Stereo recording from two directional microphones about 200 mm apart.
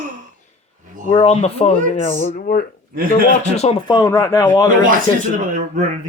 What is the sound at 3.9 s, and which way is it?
Speech, 15° left (ahead or behind).